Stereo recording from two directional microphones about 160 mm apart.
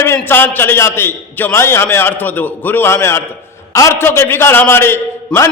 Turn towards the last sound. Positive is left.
turn(degrees=15)  # may be behind; listen again after turning